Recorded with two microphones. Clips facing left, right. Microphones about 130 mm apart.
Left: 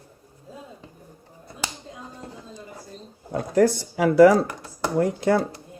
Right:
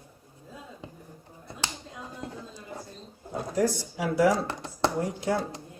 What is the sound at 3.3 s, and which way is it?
Speech, 70° left (ahead or behind).